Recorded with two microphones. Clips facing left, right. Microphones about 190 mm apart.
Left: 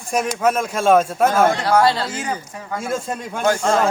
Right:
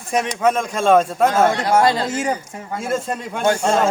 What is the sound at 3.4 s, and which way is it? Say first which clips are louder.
Speech: even; 25° right (ahead or behind).